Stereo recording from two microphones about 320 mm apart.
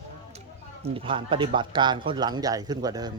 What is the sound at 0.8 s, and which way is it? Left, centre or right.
Speech, centre.